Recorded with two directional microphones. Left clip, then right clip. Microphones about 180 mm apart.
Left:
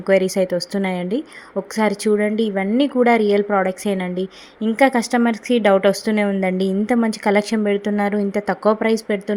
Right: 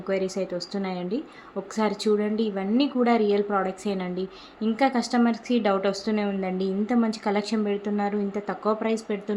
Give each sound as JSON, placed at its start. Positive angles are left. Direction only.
{"t": 0.0, "sound": "a woman's voice", "side_deg": 45}